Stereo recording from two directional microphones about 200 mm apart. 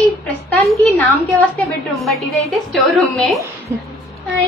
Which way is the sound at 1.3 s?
Centre (ahead or behind).